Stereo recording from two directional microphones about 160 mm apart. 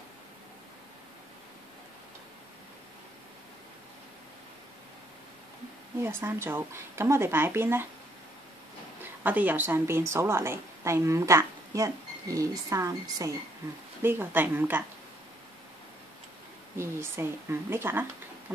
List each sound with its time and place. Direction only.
6.0 s a woman's voice: 15° right (ahead or behind)
9.2 s a woman's voice: 10° right (ahead or behind)
16.7 s a woman's voice: 15° right (ahead or behind)